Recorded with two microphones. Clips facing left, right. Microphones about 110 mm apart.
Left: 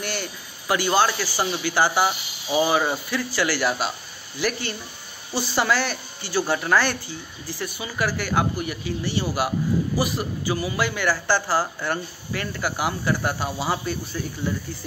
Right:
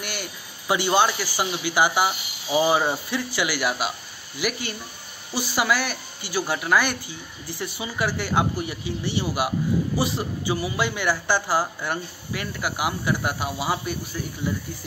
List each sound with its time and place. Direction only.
0.0 s a man's voice: 10° right (ahead or behind)